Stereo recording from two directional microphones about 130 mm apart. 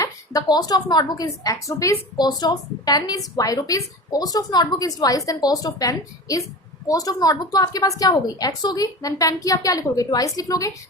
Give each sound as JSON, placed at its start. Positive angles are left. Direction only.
{"t": 0.0, "sound": "a woman's voice", "side_deg": 30}